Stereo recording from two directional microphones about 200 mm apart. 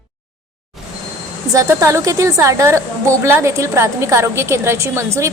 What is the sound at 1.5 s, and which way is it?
A woman's voice, 15° right (ahead or behind).